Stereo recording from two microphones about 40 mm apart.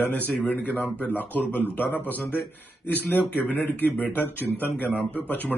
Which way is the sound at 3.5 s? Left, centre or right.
Left.